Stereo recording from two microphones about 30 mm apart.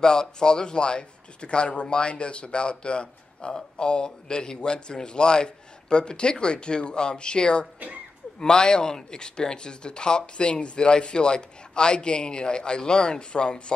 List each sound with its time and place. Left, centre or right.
0.0 s speech: left